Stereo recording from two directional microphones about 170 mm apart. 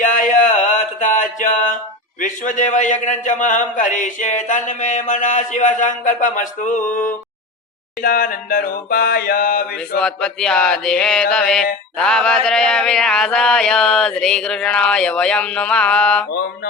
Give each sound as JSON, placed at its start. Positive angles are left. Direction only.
{"t": 0.0, "sound": "a sound", "side_deg": 50}
{"t": 2.2, "sound": "a man's voice", "side_deg": 50}
{"t": 8.0, "sound": "mantra", "side_deg": 55}
{"t": 10.0, "sound": "mantra", "side_deg": 5}